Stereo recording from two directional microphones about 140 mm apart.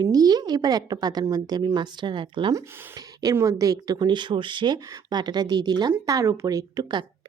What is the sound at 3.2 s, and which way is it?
A woman's voice, 25° right (ahead or behind).